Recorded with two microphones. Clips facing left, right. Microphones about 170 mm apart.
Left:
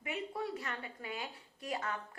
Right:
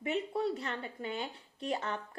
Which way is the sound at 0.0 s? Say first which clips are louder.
Right 6 dB; 30° right (ahead or behind).